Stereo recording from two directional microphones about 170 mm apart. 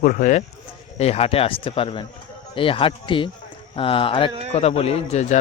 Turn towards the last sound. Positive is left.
turn(degrees=45)  # may be behind; listen again after turning